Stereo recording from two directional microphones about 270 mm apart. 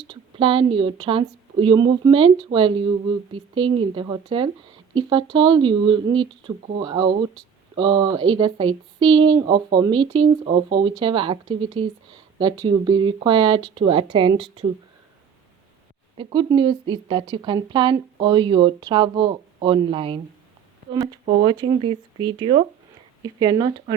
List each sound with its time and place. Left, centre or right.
0.1 s speech: centre
16.1 s speech: centre